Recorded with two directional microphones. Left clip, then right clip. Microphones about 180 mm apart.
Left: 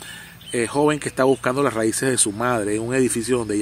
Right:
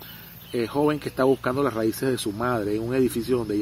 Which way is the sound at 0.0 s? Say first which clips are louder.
Left 7 dB; 15° left (ahead or behind).